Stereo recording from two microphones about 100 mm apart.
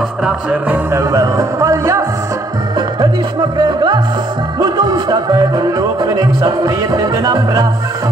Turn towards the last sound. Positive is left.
turn(degrees=-35)  # may be behind; listen again after turning